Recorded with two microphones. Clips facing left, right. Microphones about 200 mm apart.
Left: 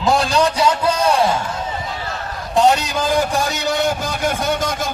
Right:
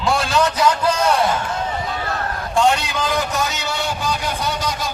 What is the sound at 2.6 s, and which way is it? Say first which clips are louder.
A man's voice: left 4 dB; 40° left (ahead or behind).